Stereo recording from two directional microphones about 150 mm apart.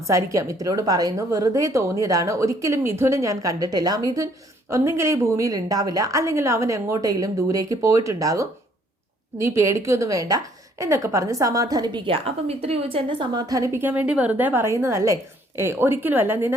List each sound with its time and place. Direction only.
0.1 s a woman's voice: 20° right (ahead or behind)
13.7 s a woman's voice: 10° right (ahead or behind)